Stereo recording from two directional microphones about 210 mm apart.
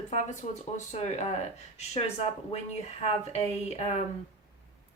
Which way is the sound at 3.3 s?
30° left (ahead or behind).